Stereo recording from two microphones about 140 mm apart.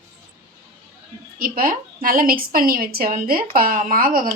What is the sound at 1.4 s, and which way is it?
A woman's voice, 85° right.